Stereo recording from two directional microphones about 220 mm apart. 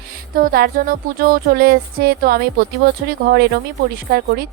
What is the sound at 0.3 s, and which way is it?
A woman's voice, 40° right (ahead or behind).